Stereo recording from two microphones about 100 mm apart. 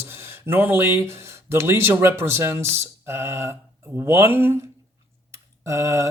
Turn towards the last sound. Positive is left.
turn(degrees=-30)  # may be behind; listen again after turning